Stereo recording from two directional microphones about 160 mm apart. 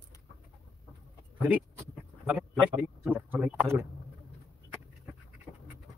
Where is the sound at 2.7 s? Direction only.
15° right (ahead or behind).